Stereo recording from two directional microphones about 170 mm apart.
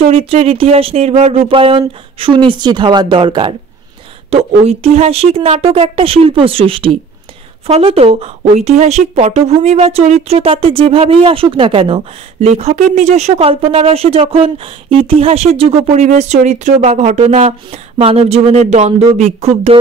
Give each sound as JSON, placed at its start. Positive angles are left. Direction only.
{"t": 0.0, "sound": "speech", "side_deg": -35}